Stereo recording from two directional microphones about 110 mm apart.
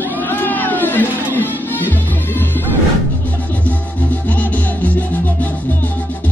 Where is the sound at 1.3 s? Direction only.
20° left (ahead or behind).